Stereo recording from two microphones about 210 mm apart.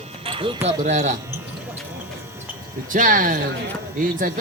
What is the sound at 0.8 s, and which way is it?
Speech, 35° right (ahead or behind).